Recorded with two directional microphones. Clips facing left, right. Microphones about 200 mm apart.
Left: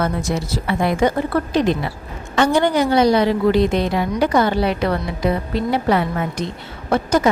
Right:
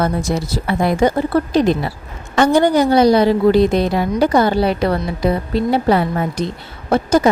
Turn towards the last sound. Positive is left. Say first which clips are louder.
# right 3 dB
turn(degrees=-30)  # may be behind; listen again after turning